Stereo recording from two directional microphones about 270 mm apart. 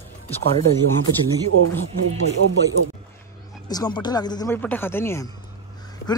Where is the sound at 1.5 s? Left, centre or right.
Right.